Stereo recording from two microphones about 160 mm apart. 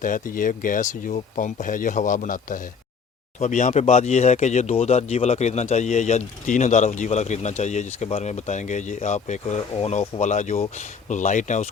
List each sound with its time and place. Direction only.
0.0 s speech: 55° left (ahead or behind)